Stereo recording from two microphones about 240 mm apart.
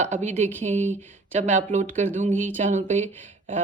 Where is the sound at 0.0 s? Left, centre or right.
Right.